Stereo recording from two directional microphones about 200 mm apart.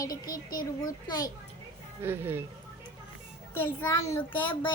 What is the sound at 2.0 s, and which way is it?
Speech, 10° right (ahead or behind).